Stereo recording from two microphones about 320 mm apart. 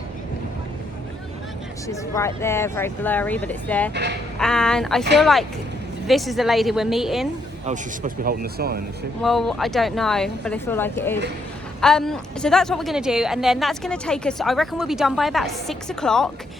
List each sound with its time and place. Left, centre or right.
1.9 s speech: centre
3.9 s speech: right
4.4 s speech: centre
7.6 s speech: right
9.2 s speech: centre